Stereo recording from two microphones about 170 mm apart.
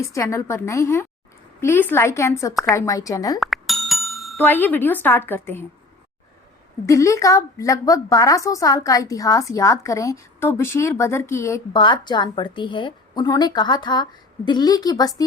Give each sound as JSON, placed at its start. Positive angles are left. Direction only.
{"t": 0.1, "sound": "a woman's voice", "side_deg": 15}
{"t": 3.4, "sound": "bicycle bell", "side_deg": 0}
{"t": 4.4, "sound": "a woman's voice", "side_deg": 10}
{"t": 6.8, "sound": "a woman's voice", "side_deg": 20}